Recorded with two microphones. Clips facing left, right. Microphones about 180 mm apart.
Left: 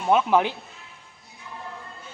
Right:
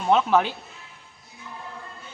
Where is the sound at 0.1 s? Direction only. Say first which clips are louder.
Even; 15° left (ahead or behind).